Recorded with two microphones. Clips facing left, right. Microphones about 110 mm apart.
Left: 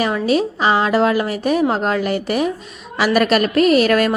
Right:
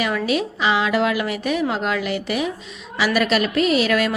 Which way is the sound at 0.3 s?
40° left (ahead or behind).